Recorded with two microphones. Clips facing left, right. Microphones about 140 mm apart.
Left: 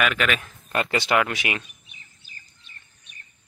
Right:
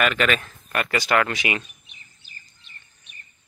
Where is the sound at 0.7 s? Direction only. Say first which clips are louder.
Even; 25° left (ahead or behind).